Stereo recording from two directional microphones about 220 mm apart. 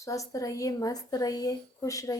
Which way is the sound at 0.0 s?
15° left (ahead or behind).